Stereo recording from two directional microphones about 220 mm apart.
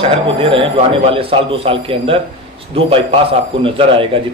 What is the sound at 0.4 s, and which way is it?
Speech, 25° right (ahead or behind).